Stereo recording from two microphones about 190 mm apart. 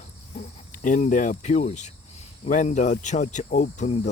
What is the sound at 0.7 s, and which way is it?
Speech, 40° left (ahead or behind).